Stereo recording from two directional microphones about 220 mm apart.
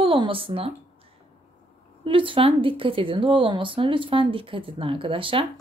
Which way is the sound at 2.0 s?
25° right (ahead or behind).